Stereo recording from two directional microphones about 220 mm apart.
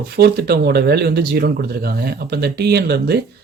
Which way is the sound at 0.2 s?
45° right (ahead or behind).